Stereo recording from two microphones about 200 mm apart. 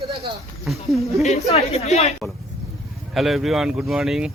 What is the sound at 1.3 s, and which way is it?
Speech, 30° left (ahead or behind).